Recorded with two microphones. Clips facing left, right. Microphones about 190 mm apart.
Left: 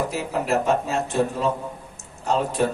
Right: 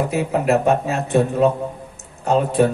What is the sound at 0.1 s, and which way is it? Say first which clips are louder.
Speech: right 6 dB; 60° right (ahead or behind).